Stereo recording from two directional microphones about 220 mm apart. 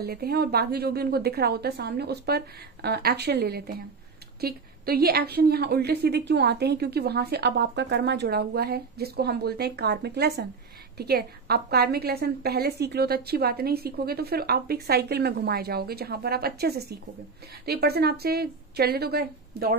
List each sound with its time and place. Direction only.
0.0 s a woman's voice: 45° right (ahead or behind)